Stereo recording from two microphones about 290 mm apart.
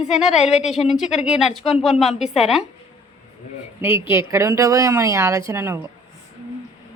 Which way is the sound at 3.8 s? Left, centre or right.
Centre.